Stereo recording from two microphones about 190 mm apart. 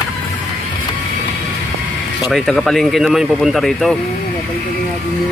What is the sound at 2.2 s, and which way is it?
Speech, centre (ahead or behind).